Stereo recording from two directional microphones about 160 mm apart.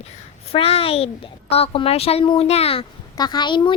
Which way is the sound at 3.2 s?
25° left (ahead or behind).